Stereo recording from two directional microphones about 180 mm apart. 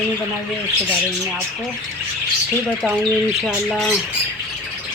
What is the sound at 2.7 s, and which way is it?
Speech, 10° right (ahead or behind).